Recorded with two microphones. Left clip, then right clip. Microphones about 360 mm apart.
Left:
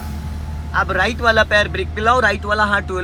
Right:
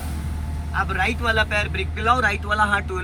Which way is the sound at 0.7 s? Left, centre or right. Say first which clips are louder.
Left 5 dB; centre.